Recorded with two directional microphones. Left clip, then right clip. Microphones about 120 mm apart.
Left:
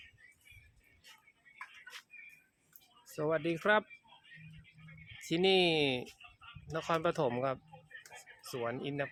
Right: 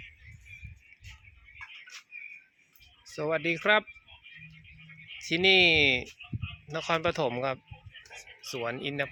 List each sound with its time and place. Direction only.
3.1 s speech: 15° right (ahead or behind)
5.2 s speech: 10° right (ahead or behind)
8.1 s a sound: 15° right (ahead or behind)